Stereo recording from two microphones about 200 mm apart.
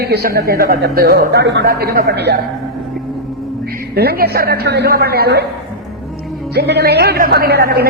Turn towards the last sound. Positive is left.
turn(degrees=-50)  # may be behind; listen again after turning